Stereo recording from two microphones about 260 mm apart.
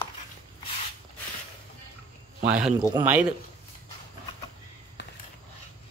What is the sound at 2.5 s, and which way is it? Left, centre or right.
Speech, centre.